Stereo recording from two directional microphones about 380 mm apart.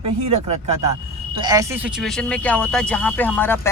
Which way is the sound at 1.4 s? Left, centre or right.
Centre.